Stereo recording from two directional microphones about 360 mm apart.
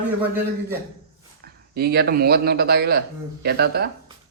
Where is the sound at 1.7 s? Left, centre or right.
Right.